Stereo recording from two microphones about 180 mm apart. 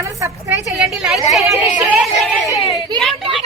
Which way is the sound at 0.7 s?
Centre (ahead or behind).